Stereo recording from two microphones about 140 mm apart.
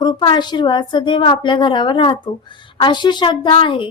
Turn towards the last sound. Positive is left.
turn(degrees=40)  # may be behind; listen again after turning